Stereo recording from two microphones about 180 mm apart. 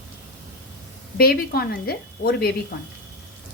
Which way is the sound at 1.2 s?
55° left (ahead or behind).